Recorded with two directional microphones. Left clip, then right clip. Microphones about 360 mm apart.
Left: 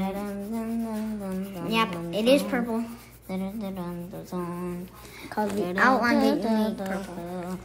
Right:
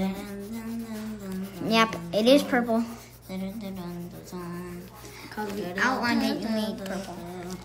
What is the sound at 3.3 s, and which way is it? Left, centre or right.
A woman's voice, centre.